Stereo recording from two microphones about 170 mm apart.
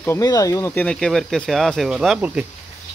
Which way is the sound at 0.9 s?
5° left (ahead or behind).